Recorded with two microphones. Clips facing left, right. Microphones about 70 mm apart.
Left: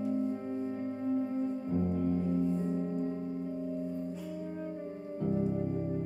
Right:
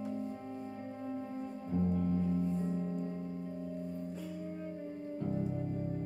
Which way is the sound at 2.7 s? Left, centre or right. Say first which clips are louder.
Left 4 dB; centre.